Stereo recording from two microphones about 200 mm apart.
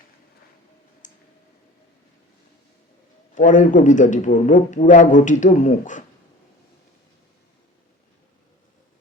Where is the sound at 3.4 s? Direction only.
40° left (ahead or behind).